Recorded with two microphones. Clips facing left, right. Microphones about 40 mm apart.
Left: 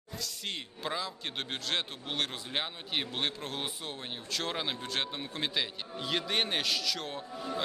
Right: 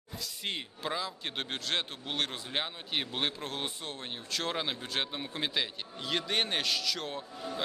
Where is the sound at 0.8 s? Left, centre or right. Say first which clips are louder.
Left 1 dB; centre.